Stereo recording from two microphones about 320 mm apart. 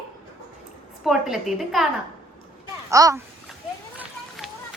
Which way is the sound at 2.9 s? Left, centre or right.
Centre.